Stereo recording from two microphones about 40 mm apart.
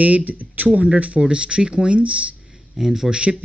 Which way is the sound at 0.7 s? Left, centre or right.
Right.